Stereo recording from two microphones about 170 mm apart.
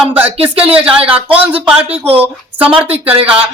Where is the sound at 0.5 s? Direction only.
35° right (ahead or behind).